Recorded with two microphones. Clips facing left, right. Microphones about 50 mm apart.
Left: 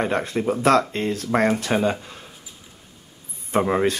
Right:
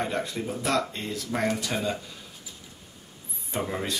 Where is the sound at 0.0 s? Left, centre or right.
Left.